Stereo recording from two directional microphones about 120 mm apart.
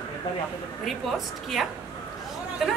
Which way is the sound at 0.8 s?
Centre (ahead or behind).